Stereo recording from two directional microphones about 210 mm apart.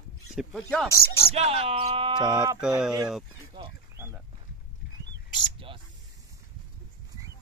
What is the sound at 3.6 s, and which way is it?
Wild animals, 25° right (ahead or behind).